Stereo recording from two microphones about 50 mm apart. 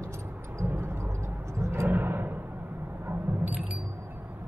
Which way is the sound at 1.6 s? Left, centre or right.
Right.